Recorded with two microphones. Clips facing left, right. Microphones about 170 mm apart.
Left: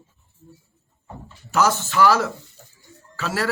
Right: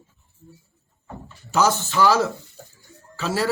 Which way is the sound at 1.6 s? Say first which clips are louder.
Left 1 dB; centre (ahead or behind).